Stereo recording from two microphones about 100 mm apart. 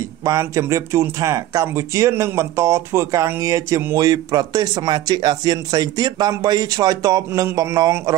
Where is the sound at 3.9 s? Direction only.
40° right (ahead or behind).